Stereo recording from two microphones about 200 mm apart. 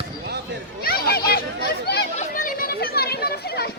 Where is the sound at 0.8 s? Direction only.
50° left (ahead or behind).